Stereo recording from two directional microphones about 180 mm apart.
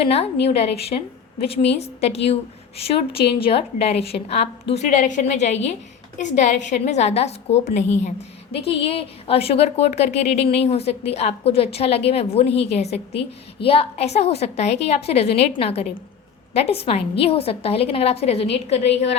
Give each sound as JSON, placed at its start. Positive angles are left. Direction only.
{"t": 0.0, "sound": "a woman's voice", "side_deg": 35}